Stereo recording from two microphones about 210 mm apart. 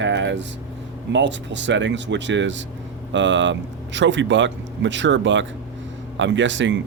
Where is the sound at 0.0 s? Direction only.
60° right (ahead or behind).